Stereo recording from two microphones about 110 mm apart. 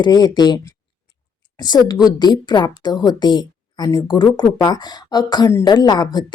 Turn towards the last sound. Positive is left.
turn(degrees=35)  # may be behind; listen again after turning